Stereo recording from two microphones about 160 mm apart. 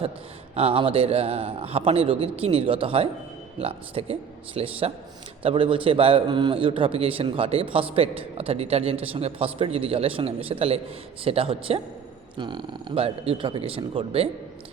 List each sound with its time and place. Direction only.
0.5 s a man's voice: 35° right (ahead or behind)